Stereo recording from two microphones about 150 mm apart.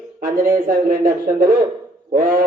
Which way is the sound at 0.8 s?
65° right (ahead or behind).